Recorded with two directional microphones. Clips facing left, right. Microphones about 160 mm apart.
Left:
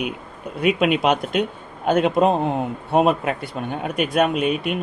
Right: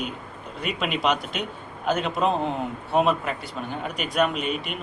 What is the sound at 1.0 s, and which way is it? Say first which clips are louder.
Speech: left 6 dB; 50° left (ahead or behind).